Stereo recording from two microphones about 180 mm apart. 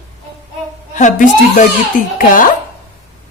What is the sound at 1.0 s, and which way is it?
A woman's voice, 45° left (ahead or behind).